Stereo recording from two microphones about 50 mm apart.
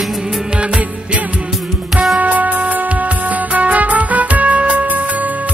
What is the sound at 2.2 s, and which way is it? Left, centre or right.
Music, right.